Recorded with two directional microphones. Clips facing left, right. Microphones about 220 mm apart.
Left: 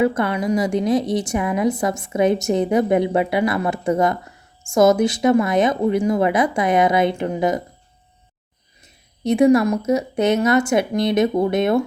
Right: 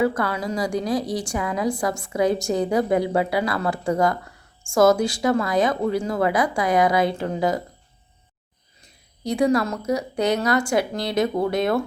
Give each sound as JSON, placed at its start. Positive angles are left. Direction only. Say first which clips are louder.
{"t": 0.0, "sound": "a woman's voice", "louder": "left 3 dB", "side_deg": 20}
{"t": 9.2, "sound": "a woman's voice", "louder": "left 6 dB", "side_deg": 20}